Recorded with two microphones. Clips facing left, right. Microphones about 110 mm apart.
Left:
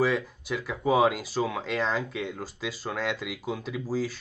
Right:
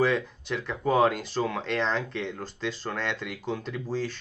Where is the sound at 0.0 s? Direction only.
5° left (ahead or behind).